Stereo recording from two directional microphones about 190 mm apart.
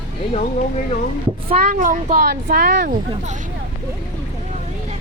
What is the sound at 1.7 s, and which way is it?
Speech, 45° right (ahead or behind).